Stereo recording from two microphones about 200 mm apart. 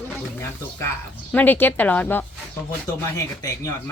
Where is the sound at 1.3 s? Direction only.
10° left (ahead or behind).